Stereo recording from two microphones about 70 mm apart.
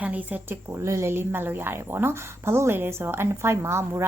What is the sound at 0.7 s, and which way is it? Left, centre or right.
A woman's voice, right.